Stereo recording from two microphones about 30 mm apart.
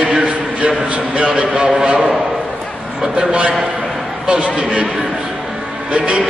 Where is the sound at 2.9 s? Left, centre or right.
Right.